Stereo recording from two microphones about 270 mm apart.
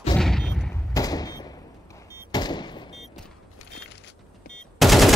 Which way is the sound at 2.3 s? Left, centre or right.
Centre.